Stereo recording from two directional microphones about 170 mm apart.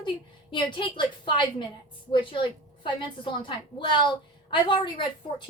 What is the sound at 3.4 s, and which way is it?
A woman's voice, 30° left (ahead or behind).